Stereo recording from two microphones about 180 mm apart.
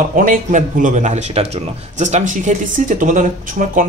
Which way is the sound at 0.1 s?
50° right (ahead or behind).